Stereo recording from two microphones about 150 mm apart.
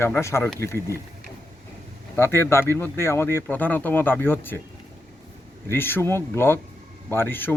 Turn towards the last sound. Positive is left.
turn(degrees=15)  # may be behind; listen again after turning